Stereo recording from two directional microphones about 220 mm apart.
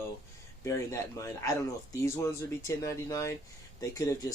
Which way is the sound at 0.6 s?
15° left (ahead or behind).